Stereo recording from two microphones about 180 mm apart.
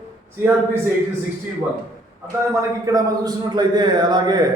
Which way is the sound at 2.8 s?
20° right (ahead or behind).